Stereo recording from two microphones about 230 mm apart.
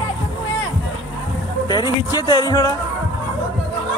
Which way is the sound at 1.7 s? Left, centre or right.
Centre.